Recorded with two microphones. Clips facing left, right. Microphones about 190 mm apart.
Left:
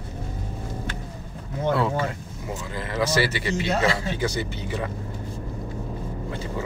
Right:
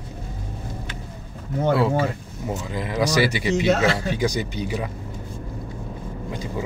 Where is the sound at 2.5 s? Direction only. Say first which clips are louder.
Right 3 dB; 15° right (ahead or behind).